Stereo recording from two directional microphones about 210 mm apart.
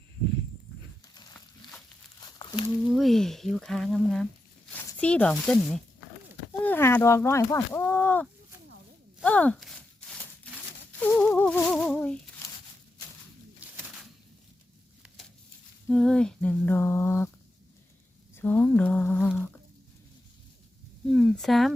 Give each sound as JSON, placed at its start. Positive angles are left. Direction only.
{"t": 2.4, "sound": "a sound", "side_deg": 25}
{"t": 2.9, "sound": "speech", "side_deg": 0}
{"t": 11.0, "sound": "speech", "side_deg": 10}
{"t": 13.6, "sound": "bird", "side_deg": -5}
{"t": 15.9, "sound": "speech", "side_deg": 0}
{"t": 18.3, "sound": "speech", "side_deg": 10}
{"t": 21.1, "sound": "speech", "side_deg": 0}